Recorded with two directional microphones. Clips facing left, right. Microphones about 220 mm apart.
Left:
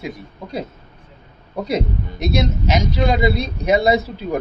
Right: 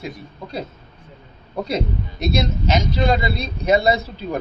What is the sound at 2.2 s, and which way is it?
Speech, 15° left (ahead or behind).